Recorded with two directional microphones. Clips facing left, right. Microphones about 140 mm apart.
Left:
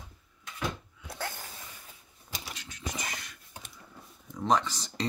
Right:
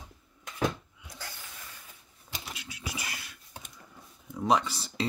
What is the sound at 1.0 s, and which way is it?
Sneeze, 55° left (ahead or behind).